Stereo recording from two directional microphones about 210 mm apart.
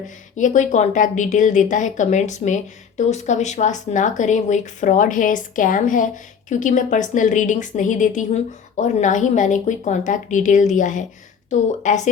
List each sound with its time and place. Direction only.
0.3 s a woman's voice: 35° left (ahead or behind)